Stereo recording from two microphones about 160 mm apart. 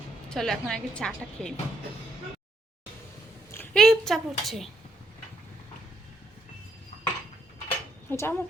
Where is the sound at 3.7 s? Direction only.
Centre (ahead or behind).